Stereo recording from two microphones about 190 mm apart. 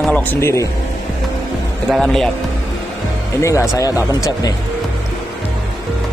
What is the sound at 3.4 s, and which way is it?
Speech, 15° left (ahead or behind).